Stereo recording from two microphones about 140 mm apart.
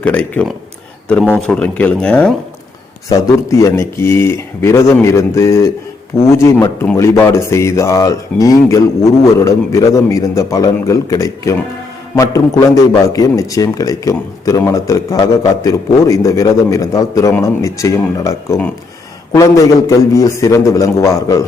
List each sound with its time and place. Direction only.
0.0 s speech: 10° left (ahead or behind)
3.1 s speech: 20° left (ahead or behind)